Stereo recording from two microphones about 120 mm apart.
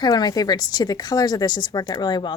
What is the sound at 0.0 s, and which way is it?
Speech, 35° left (ahead or behind).